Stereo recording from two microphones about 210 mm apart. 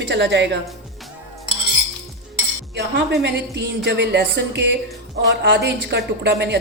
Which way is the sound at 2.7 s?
55° right (ahead or behind).